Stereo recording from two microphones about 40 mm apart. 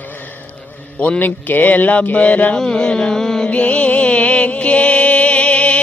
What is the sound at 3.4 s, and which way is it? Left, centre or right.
Music, left.